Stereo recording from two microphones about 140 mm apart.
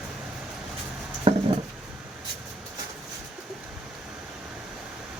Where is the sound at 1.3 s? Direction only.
40° right (ahead or behind).